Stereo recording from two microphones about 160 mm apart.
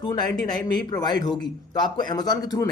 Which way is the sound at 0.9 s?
25° left (ahead or behind).